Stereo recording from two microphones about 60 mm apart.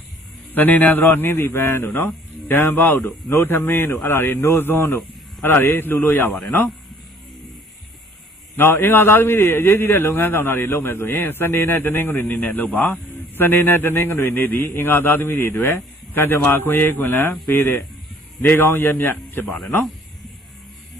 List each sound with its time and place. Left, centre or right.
0.5 s a man's voice: left
8.5 s a man's voice: left
12.4 s a man's voice: left
19.5 s speech: centre